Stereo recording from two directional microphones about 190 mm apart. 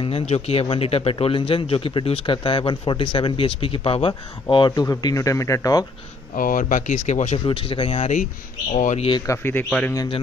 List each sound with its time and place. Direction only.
0.0 s a man's voice: 30° left (ahead or behind)
6.3 s speech: 45° left (ahead or behind)
7.4 s a man's voice: 25° left (ahead or behind)
9.2 s speech: 15° left (ahead or behind)
9.9 s a man's voice: 30° left (ahead or behind)